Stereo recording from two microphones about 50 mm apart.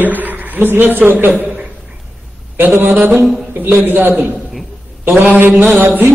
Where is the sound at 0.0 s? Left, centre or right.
Right.